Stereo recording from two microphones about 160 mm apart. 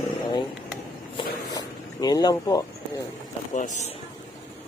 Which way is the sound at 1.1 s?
25° left (ahead or behind).